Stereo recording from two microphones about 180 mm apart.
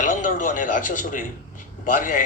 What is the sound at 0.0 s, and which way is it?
A man's voice, 45° left (ahead or behind).